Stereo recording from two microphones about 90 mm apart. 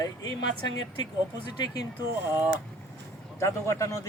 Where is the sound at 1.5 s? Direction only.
50° left (ahead or behind).